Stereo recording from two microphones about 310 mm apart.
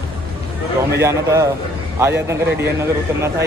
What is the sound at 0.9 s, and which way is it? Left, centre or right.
A man's voice, centre.